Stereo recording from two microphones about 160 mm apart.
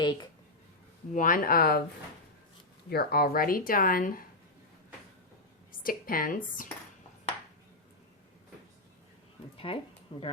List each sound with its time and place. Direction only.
0.0 s a sound: 30° left (ahead or behind)
1.1 s speech: 60° left (ahead or behind)
2.9 s speech: 75° left (ahead or behind)
5.8 s speech: 60° left (ahead or behind)
9.7 s speech: 35° left (ahead or behind)